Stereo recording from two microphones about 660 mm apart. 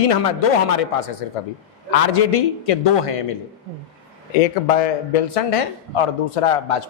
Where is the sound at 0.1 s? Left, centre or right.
Left.